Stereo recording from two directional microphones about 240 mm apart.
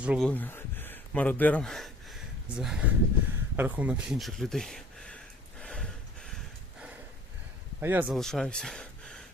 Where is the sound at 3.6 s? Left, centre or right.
Centre.